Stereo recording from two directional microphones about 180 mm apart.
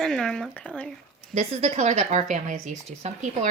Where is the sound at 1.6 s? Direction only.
40° right (ahead or behind).